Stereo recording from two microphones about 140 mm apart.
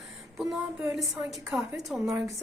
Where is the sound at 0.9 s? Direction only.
5° right (ahead or behind).